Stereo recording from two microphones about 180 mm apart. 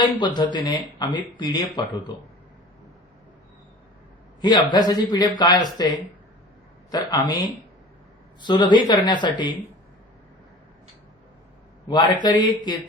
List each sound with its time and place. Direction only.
0.0 s speech: 25° left (ahead or behind)
4.4 s speech: 25° left (ahead or behind)
6.9 s speech: 20° left (ahead or behind)
11.9 s speech: 25° left (ahead or behind)